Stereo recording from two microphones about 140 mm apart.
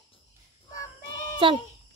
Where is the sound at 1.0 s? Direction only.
35° left (ahead or behind).